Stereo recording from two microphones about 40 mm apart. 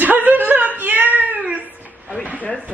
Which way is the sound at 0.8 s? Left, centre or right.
Right.